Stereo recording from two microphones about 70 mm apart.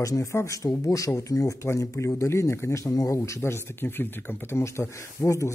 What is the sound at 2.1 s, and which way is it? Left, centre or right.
Speech, left.